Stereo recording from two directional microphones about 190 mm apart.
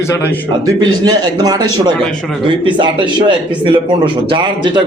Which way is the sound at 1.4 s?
20° right (ahead or behind).